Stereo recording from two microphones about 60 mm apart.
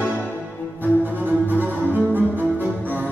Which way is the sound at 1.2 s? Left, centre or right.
Right.